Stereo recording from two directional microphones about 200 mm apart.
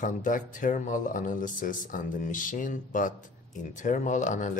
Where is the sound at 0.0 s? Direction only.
40° left (ahead or behind).